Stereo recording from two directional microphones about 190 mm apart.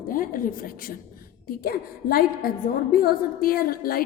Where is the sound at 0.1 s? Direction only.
45° left (ahead or behind).